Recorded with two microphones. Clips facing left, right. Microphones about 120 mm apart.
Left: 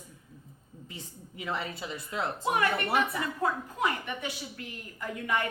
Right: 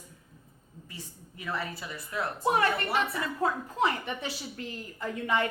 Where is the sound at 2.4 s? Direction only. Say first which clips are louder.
Right 3 dB; 30° right (ahead or behind).